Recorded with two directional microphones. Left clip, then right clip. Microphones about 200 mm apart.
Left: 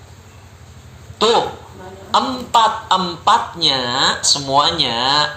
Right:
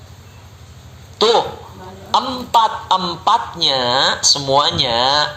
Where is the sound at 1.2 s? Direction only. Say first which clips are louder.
Right 1 dB; 40° right (ahead or behind).